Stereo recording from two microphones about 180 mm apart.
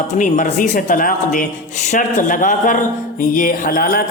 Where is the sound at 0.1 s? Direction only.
45° left (ahead or behind).